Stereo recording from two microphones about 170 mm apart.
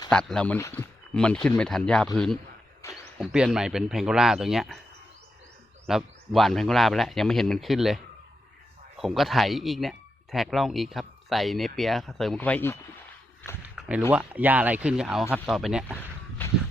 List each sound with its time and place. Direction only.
0.1 s speech: 5° left (ahead or behind)
2.8 s a sound: 15° left (ahead or behind)
3.2 s speech: 5° right (ahead or behind)
5.9 s speech: centre (ahead or behind)
13.7 s a sound: 5° right (ahead or behind)
14.1 s speech: 10° right (ahead or behind)
16.4 s walk: 10° left (ahead or behind)